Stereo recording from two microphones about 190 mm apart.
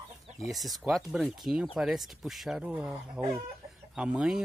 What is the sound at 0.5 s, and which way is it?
Speech, centre (ahead or behind).